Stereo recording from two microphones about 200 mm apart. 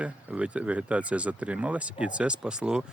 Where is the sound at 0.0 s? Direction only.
5° right (ahead or behind).